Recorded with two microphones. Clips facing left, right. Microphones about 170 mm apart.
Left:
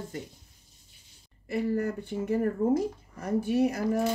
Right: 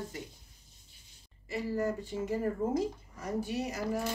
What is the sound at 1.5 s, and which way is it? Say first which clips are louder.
Speech: left 4 dB; 60° left (ahead or behind).